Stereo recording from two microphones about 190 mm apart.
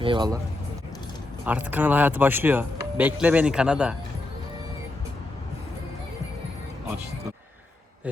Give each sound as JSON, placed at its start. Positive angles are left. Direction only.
{"t": 0.0, "sound": "speech", "side_deg": -25}
{"t": 1.5, "sound": "speech", "side_deg": -10}